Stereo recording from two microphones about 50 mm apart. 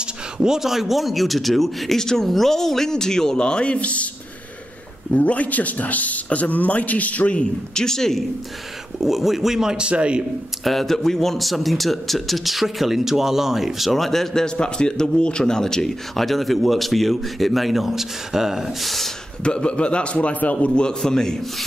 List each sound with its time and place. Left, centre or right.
0.0 s speech: centre; by 4.1 s left
5.1 s speech: left
7.8 s a man's voice: centre
9.0 s speech: centre; by 10.2 s right
10.6 s speech: centre
19.4 s a man's voice: left
20.7 s a man's voice: centre